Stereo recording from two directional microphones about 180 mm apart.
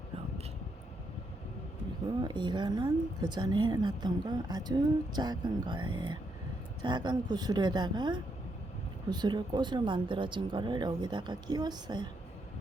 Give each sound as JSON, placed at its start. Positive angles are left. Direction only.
{"t": 2.2, "sound": "speech", "side_deg": -25}